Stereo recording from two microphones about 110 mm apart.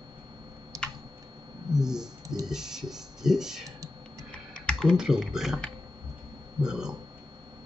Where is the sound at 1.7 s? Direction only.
5° right (ahead or behind).